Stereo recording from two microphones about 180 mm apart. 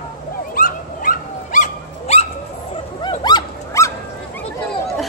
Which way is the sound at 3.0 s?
25° left (ahead or behind).